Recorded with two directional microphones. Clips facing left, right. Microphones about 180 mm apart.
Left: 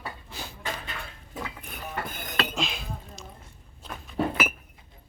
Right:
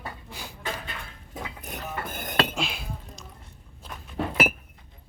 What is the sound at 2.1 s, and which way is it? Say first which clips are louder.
Cutlery: right 3 dB; 50° right (ahead or behind).